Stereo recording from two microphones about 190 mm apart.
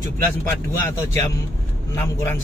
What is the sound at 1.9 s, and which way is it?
Speech, 10° left (ahead or behind).